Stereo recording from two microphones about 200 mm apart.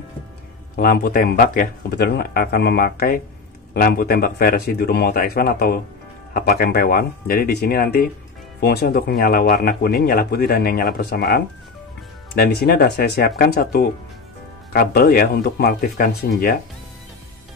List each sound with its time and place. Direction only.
0.7 s a man's voice: 50° left (ahead or behind)